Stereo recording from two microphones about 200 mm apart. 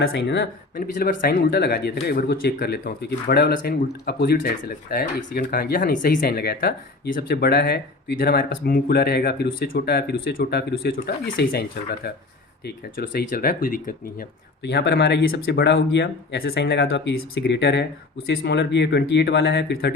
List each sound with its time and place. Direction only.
0.0 s speech: 60° left (ahead or behind)
0.9 s speech: 45° left (ahead or behind)